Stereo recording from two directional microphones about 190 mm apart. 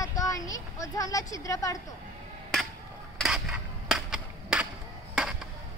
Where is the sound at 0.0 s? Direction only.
15° left (ahead or behind).